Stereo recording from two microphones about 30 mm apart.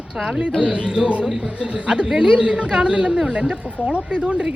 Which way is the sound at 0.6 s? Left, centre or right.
Right.